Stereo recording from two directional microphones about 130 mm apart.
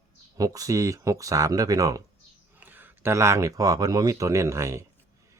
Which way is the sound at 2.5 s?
15° right (ahead or behind).